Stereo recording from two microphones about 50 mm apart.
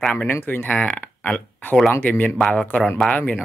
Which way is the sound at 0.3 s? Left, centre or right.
Left.